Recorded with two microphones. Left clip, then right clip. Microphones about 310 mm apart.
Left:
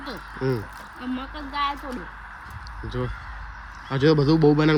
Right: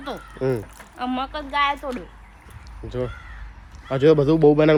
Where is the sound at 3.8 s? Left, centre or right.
Centre.